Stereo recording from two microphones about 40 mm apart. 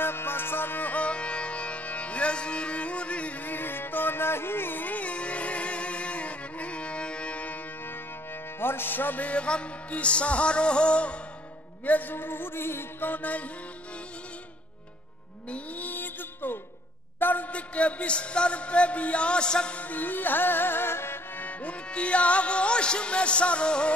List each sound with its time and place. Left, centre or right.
0.0 s music: left
1.0 s music: left
3.4 s music: left
8.5 s music: left
9.3 s music: left
11.8 s music: left
12.2 s music: left
13.1 s music: left
15.9 s music: left
17.2 s a sound: left
17.5 s music: left
19.8 s music: left
21.4 s music: left
21.9 s music: left